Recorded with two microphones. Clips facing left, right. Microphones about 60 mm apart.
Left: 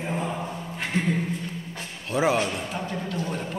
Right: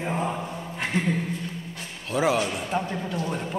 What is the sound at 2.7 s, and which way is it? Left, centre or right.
Speech, centre.